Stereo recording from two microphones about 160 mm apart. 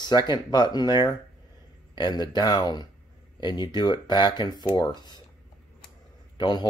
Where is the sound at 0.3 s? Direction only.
25° left (ahead or behind).